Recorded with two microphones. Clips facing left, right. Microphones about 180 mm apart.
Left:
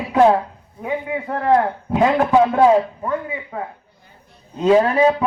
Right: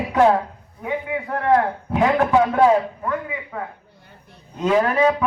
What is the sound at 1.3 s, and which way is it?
A man's voice, 30° left (ahead or behind).